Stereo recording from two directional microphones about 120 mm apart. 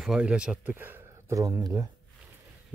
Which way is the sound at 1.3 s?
30° right (ahead or behind).